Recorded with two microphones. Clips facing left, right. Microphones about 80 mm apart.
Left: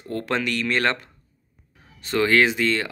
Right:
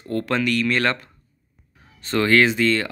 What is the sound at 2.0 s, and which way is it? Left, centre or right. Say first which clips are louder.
Speech: right 1 dB; centre.